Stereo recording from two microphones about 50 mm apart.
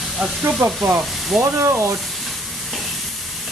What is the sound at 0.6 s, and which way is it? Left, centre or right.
Speech, right.